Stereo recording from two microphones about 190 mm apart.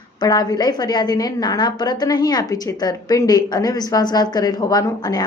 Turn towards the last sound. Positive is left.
turn(degrees=20)  # may be behind; listen again after turning